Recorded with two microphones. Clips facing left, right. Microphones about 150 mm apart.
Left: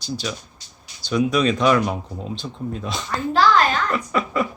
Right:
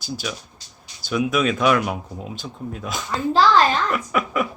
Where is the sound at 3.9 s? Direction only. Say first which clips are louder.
Even; 5° right (ahead or behind).